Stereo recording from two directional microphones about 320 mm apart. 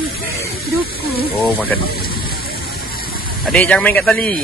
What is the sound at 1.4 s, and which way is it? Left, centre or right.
Speech, centre.